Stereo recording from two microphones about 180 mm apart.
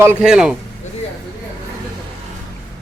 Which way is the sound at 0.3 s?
5° right (ahead or behind).